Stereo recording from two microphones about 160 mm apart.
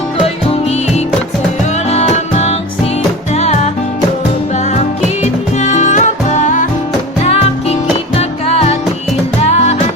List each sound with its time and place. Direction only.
1.9 s music: 40° left (ahead or behind)
5.2 s music: 45° left (ahead or behind)
7.3 s music: 40° left (ahead or behind)